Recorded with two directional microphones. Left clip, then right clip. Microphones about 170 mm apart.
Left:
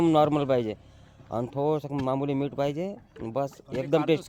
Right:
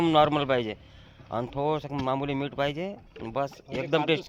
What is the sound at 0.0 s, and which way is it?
Speech, 45° left (ahead or behind).